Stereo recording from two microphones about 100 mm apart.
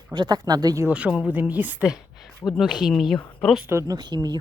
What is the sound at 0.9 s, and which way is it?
Speech, 10° right (ahead or behind).